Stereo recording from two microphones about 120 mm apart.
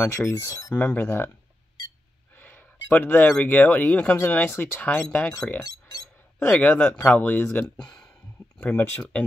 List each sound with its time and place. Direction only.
0.0 s speech: 20° left (ahead or behind)
2.3 s speech: 15° left (ahead or behind)
5.6 s chink: 30° left (ahead or behind)
6.5 s speech: 15° left (ahead or behind)